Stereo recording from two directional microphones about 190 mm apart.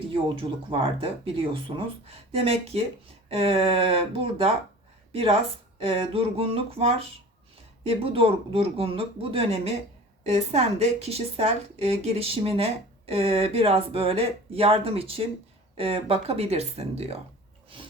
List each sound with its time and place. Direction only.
0.1 s a woman's voice: 25° right (ahead or behind)